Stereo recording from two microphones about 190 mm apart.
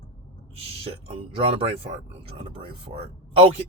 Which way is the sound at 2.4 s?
25° right (ahead or behind).